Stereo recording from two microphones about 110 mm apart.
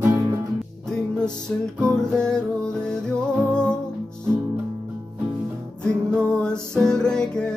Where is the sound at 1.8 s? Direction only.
10° left (ahead or behind).